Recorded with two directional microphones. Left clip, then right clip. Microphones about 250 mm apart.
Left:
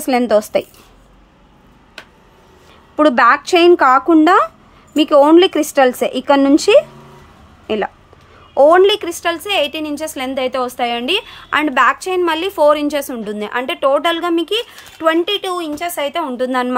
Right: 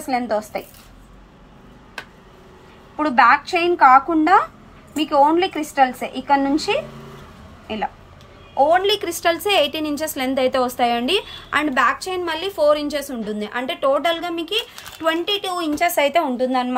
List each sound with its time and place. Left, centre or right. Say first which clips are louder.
0.1 s a woman's voice: left 8 dB; left
3.0 s a woman's voice: left 4 dB; left; by 16.3 s centre
16.3 s a woman's voice: left 3 dB; centre